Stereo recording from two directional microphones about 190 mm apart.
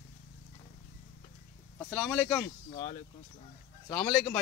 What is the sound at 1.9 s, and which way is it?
Speech, 5° right (ahead or behind).